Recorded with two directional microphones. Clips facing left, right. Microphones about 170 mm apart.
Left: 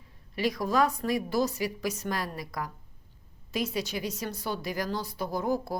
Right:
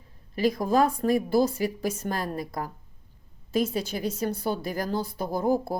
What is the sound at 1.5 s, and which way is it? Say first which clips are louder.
Speech: right 3 dB; 50° right (ahead or behind).